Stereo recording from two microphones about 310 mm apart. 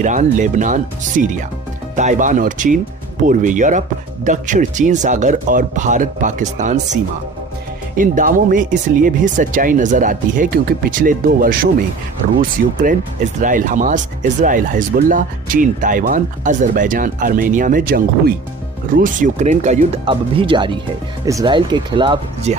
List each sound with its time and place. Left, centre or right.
0.0 s speech: right